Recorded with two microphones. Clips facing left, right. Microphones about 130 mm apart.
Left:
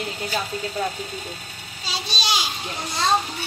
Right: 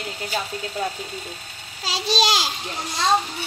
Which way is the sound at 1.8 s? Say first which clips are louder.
Right 8 dB; 90° right.